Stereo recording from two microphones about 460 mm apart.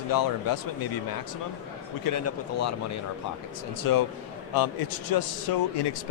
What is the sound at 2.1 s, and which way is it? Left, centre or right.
Speech, left.